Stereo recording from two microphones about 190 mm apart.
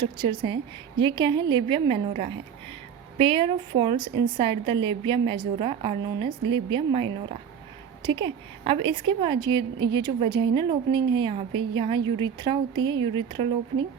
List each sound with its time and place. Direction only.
0.0 s a woman's voice: 25° right (ahead or behind)